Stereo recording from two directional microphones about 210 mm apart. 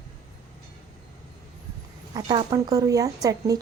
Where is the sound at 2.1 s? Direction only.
20° right (ahead or behind).